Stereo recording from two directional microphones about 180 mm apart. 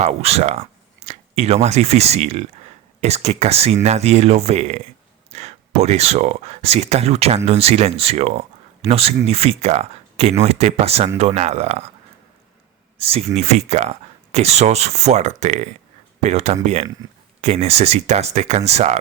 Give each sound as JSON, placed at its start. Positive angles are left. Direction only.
{"t": 0.0, "sound": "speech", "side_deg": -35}
{"t": 13.0, "sound": "speech", "side_deg": -35}